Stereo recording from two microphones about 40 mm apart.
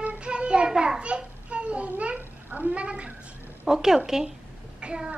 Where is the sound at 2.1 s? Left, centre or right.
Right.